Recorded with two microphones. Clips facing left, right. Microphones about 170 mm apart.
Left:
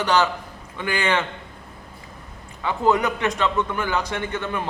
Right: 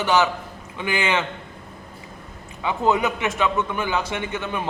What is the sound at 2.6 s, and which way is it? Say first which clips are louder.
A man's voice: even; 20° right (ahead or behind).